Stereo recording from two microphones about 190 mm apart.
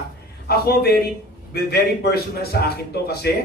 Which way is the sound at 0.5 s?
55° left (ahead or behind).